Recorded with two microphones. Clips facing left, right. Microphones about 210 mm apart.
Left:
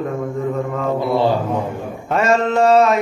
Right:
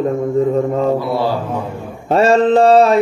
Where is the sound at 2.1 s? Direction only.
30° right (ahead or behind).